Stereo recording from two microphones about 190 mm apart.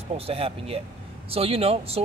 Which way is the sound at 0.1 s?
30° right (ahead or behind).